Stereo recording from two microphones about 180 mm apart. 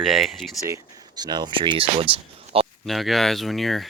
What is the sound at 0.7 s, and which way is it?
Speech, 25° right (ahead or behind).